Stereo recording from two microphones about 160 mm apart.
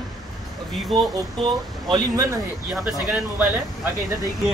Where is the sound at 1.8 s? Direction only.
25° right (ahead or behind).